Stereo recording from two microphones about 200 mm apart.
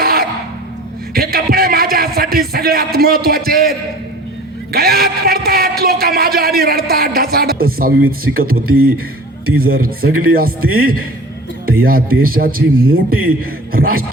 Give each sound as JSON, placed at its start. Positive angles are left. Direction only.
{"t": 0.0, "sound": "music", "side_deg": -50}
{"t": 1.1, "sound": "a sound", "side_deg": -50}
{"t": 4.7, "sound": "speech", "side_deg": -50}
{"t": 8.6, "sound": "a man's voice", "side_deg": -90}
{"t": 9.6, "sound": "speech", "side_deg": -45}
{"t": 13.1, "sound": "a man's voice", "side_deg": -90}
{"t": 13.7, "sound": "speech", "side_deg": -45}